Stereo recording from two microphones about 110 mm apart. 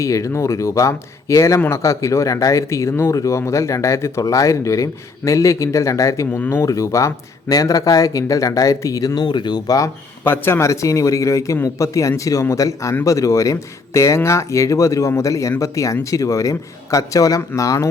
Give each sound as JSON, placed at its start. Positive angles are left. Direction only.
{"t": 0.0, "sound": "speech", "side_deg": 30}
{"t": 10.3, "sound": "speech", "side_deg": 20}